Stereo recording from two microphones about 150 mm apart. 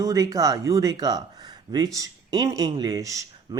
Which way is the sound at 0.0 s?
25° right (ahead or behind).